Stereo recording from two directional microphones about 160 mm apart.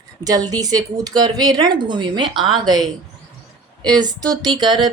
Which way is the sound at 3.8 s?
25° right (ahead or behind).